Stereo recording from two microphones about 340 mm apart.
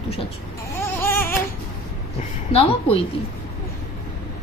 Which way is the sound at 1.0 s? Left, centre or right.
Centre.